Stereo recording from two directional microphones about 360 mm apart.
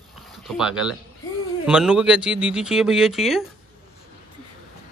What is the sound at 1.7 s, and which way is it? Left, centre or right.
Speech, centre.